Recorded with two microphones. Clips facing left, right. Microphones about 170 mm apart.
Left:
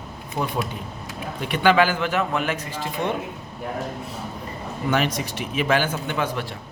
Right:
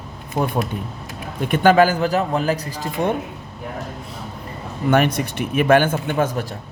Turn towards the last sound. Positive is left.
turn(degrees=-45)  # may be behind; listen again after turning